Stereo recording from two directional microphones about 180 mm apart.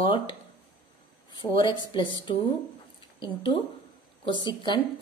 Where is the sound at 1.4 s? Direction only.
25° left (ahead or behind).